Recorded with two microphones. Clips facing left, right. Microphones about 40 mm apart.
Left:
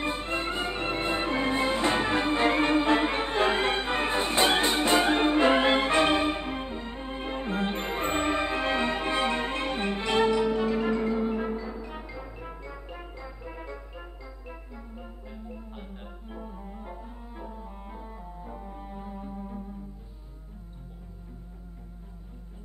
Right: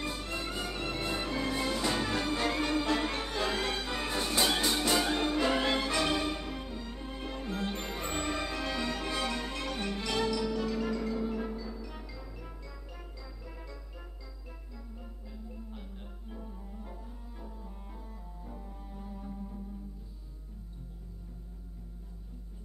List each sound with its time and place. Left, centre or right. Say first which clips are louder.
0.0 s music: left 7 dB; left